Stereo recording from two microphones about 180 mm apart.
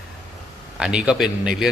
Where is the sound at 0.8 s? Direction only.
5° right (ahead or behind).